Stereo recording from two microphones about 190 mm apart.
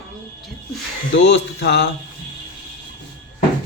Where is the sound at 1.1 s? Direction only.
70° left (ahead or behind).